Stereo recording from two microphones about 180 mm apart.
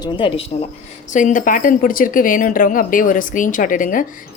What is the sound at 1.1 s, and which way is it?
Speech, 45° left (ahead or behind).